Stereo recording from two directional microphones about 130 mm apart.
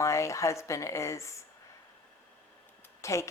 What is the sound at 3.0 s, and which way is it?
Speech, 20° left (ahead or behind).